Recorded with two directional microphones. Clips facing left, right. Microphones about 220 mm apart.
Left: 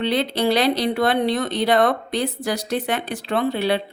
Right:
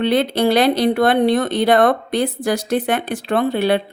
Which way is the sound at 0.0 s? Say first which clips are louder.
Right 4 dB; 50° right (ahead or behind).